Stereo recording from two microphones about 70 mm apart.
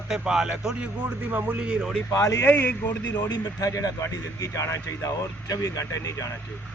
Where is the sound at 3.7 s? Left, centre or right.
Left.